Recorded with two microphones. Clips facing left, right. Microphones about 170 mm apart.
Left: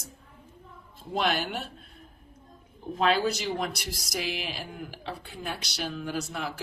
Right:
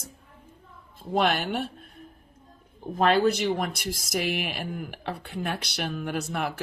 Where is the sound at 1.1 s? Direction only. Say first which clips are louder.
Right 4 dB; 55° right (ahead or behind).